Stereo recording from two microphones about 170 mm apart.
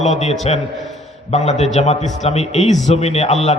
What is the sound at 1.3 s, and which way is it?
A man's voice, 40° left (ahead or behind).